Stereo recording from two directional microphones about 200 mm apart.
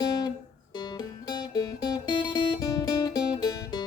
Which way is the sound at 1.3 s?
20° left (ahead or behind).